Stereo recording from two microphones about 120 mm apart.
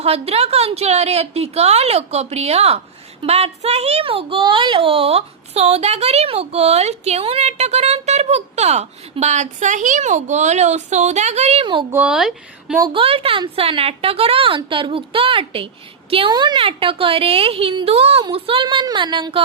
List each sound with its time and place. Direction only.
0.0 s a child's voice: 60° right (ahead or behind)
11.6 s a woman's voice: 45° right (ahead or behind)
11.9 s speech: 10° right (ahead or behind)
12.9 s a woman's voice: 50° right (ahead or behind)